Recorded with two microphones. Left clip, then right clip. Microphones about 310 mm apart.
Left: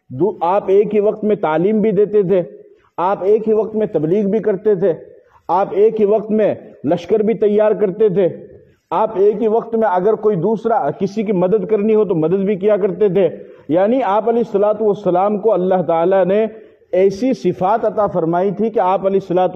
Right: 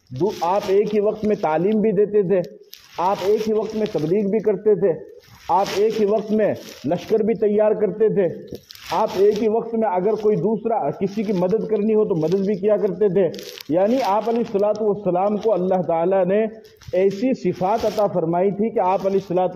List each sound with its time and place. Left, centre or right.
0.2 s a man's voice: left